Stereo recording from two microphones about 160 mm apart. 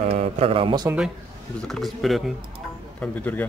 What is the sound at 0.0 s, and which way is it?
Speech, 40° right (ahead or behind).